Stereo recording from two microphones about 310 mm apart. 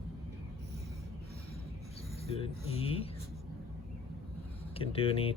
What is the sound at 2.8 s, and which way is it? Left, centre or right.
Speech, centre.